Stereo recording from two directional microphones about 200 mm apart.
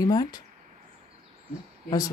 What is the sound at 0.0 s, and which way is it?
Speech, 20° left (ahead or behind).